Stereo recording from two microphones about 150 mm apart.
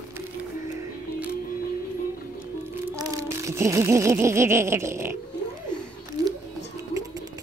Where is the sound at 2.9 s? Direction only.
25° right (ahead or behind).